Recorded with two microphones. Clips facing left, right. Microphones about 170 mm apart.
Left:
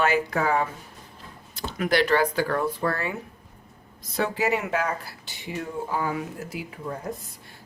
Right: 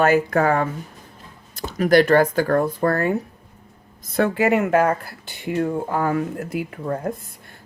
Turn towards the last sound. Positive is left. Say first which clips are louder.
# right 7 dB
turn(degrees=-55)  # may be behind; listen again after turning